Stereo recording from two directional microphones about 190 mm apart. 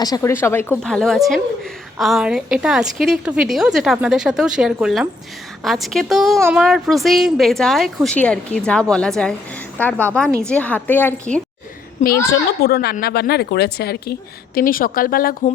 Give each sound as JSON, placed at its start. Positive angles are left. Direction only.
{"t": 0.0, "sound": "a woman's voice", "side_deg": 15}
{"t": 12.3, "sound": "a woman's voice", "side_deg": 55}